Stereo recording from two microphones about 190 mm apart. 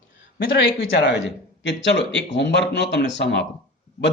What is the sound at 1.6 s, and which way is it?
Speech, 65° left (ahead or behind).